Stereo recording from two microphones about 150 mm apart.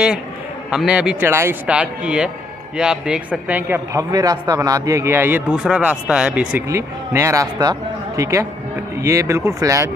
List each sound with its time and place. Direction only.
0.7 s a man's voice: 5° right (ahead or behind); by 9.8 s 20° right (ahead or behind)